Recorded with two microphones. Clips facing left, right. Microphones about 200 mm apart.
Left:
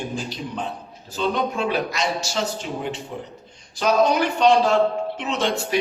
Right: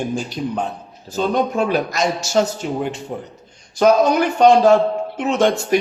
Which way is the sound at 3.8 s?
50° right (ahead or behind).